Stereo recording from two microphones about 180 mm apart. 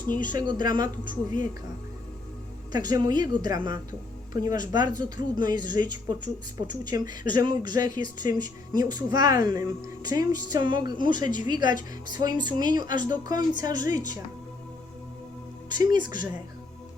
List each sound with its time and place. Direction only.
0.0 s speech: 45° left (ahead or behind)
0.3 s speech: 25° right (ahead or behind)
1.0 s speech: 45° left (ahead or behind)
2.7 s speech: 20° right (ahead or behind)
15.7 s speech: 25° right (ahead or behind)